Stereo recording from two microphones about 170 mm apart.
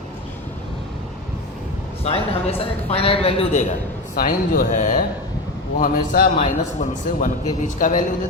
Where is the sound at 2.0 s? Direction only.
35° left (ahead or behind).